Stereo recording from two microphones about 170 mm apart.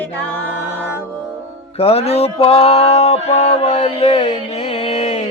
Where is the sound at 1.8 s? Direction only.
35° left (ahead or behind).